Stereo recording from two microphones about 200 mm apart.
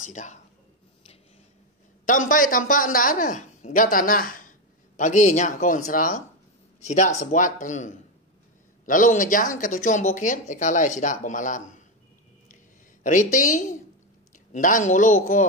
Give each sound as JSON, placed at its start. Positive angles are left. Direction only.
{"t": 0.0, "sound": "speech", "side_deg": 40}
{"t": 2.0, "sound": "speech", "side_deg": 40}
{"t": 13.0, "sound": "speech", "side_deg": 40}